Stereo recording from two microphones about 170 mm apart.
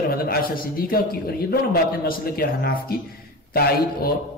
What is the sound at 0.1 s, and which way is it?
Speech, 60° left (ahead or behind).